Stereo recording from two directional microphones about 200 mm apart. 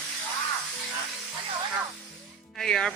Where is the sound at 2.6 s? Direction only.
5° left (ahead or behind).